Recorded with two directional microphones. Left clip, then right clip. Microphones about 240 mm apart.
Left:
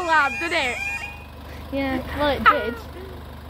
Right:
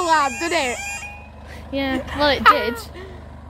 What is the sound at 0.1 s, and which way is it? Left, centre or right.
Speech, right.